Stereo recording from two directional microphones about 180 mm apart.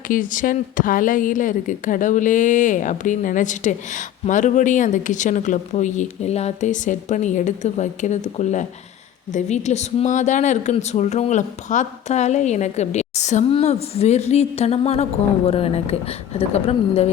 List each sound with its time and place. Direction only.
0.1 s speech: 50° left (ahead or behind)